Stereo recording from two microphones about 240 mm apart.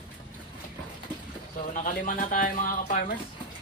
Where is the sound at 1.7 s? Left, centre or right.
Left.